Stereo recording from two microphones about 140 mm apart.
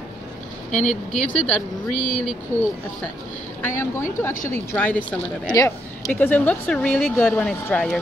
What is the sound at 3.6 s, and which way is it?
Speech, 20° left (ahead or behind).